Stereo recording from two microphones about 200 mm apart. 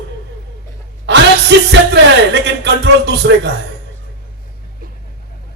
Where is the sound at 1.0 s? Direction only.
60° right (ahead or behind).